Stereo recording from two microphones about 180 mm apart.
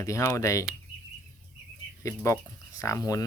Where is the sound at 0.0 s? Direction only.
15° left (ahead or behind).